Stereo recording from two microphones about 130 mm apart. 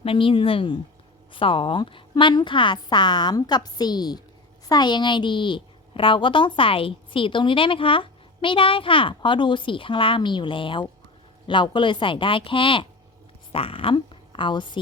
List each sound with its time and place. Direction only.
0.0 s a woman's voice: 45° left (ahead or behind)